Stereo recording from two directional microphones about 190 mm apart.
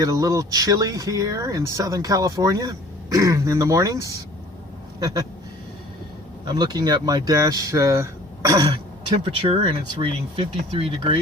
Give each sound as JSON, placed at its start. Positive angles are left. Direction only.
{"t": 0.0, "sound": "speech", "side_deg": -20}
{"t": 6.4, "sound": "speech", "side_deg": -20}